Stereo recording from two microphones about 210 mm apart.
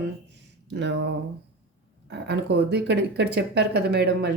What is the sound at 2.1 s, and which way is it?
Speech, 55° right (ahead or behind).